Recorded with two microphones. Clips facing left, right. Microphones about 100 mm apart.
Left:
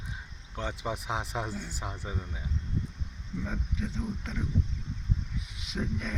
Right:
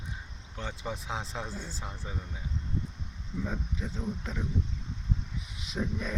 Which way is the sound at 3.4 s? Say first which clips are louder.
Left 2 dB; 5° right (ahead or behind).